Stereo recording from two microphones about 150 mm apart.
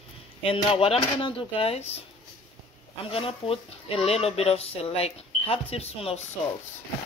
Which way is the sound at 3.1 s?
40° left (ahead or behind).